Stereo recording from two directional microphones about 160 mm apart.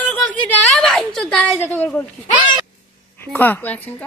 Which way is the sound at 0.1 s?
5° left (ahead or behind).